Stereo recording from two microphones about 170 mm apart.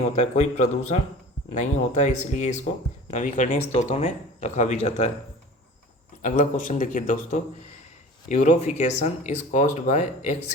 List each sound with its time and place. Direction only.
0.2 s speech: 40° left (ahead or behind)
6.2 s speech: 50° left (ahead or behind)